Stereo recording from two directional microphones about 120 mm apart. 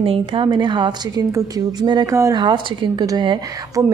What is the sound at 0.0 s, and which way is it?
A woman's voice, 45° right (ahead or behind).